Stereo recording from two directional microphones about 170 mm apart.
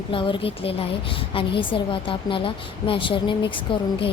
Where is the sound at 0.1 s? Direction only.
30° left (ahead or behind).